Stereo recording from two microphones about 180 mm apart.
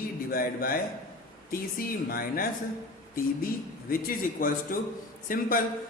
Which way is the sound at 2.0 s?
55° left (ahead or behind).